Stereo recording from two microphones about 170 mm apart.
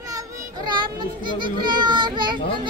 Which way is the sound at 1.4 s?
25° right (ahead or behind).